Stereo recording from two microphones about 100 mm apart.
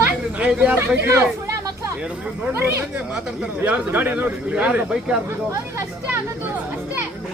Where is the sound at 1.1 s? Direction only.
25° right (ahead or behind); by 5.2 s 10° right (ahead or behind).